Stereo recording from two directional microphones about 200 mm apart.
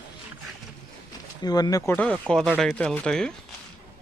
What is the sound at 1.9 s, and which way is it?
A man's voice, 5° left (ahead or behind).